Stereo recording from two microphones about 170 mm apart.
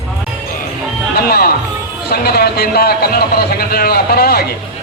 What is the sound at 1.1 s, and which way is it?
Music, 65° left (ahead or behind).